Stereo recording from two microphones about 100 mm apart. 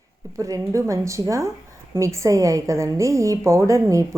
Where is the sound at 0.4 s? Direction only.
35° right (ahead or behind).